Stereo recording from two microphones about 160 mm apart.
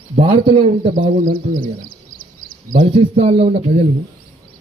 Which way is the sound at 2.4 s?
60° right (ahead or behind).